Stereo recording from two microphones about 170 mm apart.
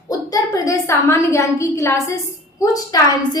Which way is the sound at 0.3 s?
20° left (ahead or behind).